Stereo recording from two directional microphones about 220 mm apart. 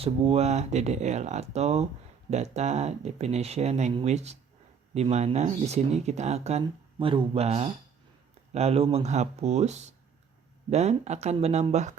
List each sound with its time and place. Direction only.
0.0 s speech: 25° right (ahead or behind)